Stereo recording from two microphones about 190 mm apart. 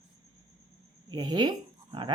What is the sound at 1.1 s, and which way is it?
Speech, 20° right (ahead or behind).